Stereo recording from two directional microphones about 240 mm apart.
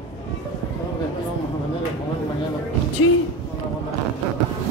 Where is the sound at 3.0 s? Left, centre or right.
Left.